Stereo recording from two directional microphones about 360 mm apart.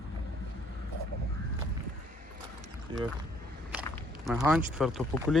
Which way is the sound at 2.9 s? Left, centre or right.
Centre.